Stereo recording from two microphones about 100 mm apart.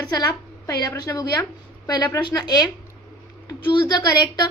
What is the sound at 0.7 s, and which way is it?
Speech, 35° left (ahead or behind).